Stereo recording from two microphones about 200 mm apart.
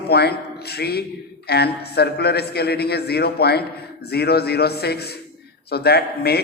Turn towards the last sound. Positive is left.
turn(degrees=55)  # may be behind; listen again after turning